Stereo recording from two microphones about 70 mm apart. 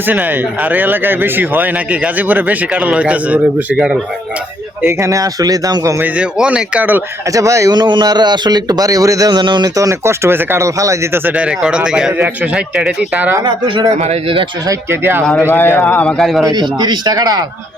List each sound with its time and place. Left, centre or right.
0.1 s speech: right
4.8 s speech: right
6.0 s speech: centre
7.3 s speech: right
7.7 s speech: right
10.0 s speech: right
11.3 s speech: centre
14.8 s speech: right
15.2 s speech: centre
15.4 s a man's voice: left
16.1 s a man's voice: centre
16.5 s speech: right